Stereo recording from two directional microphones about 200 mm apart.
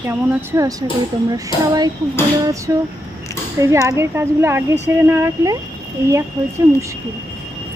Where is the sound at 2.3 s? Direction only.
15° right (ahead or behind).